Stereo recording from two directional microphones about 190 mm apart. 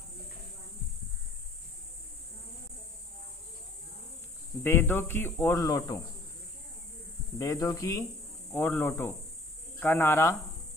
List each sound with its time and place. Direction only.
4.6 s speech: 10° left (ahead or behind)
7.3 s speech: 15° left (ahead or behind)